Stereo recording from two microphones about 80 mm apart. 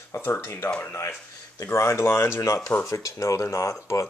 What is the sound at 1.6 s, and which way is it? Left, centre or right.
Speech, left.